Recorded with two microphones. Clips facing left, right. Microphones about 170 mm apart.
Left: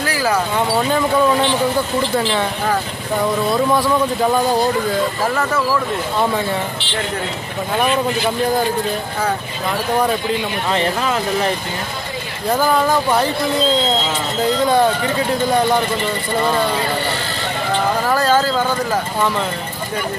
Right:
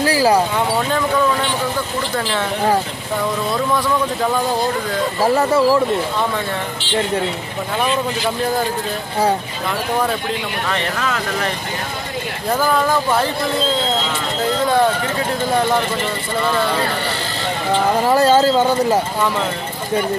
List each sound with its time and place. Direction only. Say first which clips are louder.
0.0 s a sound: right 4 dB; 30° right (ahead or behind)
5.2 s speech: right 5 dB; 30° right (ahead or behind)
10.7 s speech: left 4 dB; 25° left (ahead or behind)
18.0 s speech: right 5 dB; 25° right (ahead or behind)